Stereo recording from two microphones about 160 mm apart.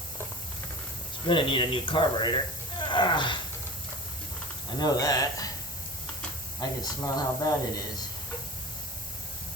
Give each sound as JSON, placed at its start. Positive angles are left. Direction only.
{"t": 1.3, "sound": "speech", "side_deg": 30}
{"t": 4.8, "sound": "speech", "side_deg": 25}
{"t": 6.6, "sound": "speech", "side_deg": 25}